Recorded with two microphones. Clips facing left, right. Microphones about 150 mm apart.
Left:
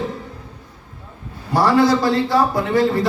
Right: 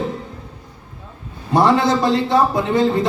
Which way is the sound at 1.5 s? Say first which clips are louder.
Even; 20° right (ahead or behind).